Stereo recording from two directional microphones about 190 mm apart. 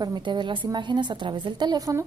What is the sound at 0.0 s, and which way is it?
A woman's voice, 25° right (ahead or behind).